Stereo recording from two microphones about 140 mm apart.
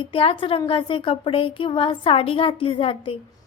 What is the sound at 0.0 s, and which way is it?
A woman's voice, 40° left (ahead or behind).